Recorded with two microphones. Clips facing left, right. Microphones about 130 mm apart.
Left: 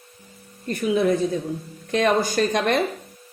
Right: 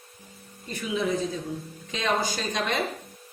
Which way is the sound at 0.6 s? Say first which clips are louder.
Left 8 dB; 55° left (ahead or behind).